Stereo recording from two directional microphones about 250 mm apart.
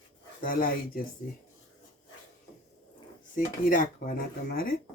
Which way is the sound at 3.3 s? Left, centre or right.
Left.